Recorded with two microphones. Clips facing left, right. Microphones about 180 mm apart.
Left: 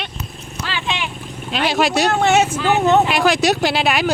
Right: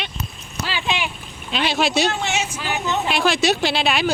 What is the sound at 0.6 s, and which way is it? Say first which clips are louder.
Clip-clop: even; 10° right (ahead or behind).